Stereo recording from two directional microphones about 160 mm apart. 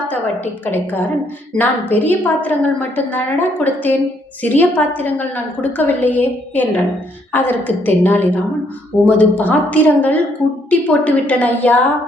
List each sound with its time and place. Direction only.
1.5 s a woman's voice: 10° left (ahead or behind)